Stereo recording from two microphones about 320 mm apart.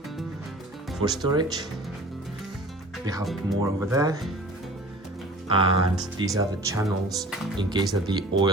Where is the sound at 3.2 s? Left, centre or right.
Centre.